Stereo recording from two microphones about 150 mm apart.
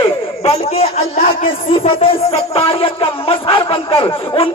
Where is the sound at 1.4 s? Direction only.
35° left (ahead or behind).